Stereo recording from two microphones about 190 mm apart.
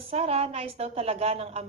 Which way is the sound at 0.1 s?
30° right (ahead or behind).